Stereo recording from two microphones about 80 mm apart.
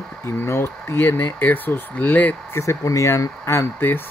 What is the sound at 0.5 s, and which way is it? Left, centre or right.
Speech, left.